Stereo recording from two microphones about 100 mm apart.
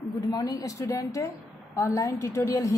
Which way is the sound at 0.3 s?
40° left (ahead or behind).